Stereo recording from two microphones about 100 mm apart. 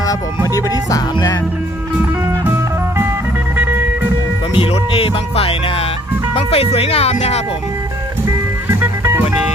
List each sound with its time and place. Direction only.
0.5 s music: 35° left (ahead or behind)
2.0 s music: 20° right (ahead or behind)
4.5 s music: 65° left (ahead or behind)
6.3 s speech: 85° left
8.6 s music: 20° right (ahead or behind)